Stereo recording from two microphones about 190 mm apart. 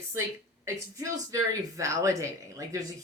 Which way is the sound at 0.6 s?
20° right (ahead or behind).